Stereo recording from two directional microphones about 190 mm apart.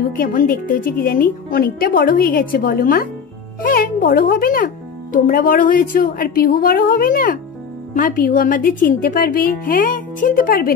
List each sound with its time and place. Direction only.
0.1 s a woman's voice: 45° left (ahead or behind)